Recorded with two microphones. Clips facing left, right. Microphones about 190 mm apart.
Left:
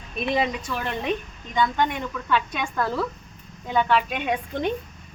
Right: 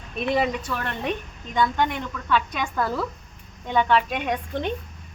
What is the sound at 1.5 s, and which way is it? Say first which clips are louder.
Speech: even; centre (ahead or behind).